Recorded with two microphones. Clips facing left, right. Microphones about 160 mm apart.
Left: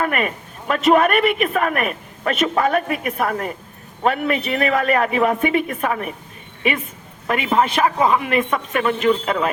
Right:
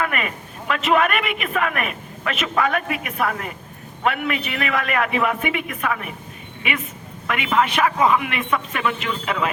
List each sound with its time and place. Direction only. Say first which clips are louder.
0.0 s a man's voice: left 3 dB; 40° left (ahead or behind)